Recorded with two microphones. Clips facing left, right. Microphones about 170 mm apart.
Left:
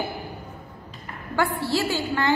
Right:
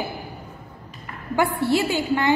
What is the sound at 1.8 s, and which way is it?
Speech, 20° right (ahead or behind).